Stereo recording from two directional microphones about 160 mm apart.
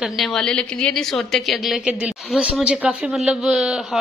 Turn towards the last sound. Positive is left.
turn(degrees=-5)  # may be behind; listen again after turning